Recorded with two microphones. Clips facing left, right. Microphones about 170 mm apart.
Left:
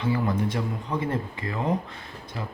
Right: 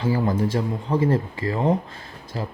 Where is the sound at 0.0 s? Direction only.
35° right (ahead or behind).